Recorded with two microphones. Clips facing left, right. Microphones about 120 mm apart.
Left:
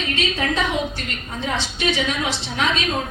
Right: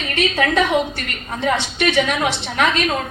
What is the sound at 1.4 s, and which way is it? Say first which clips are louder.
A woman's voice: right 5 dB; 60° right (ahead or behind).